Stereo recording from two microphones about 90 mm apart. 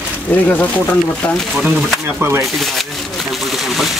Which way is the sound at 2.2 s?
30° right (ahead or behind).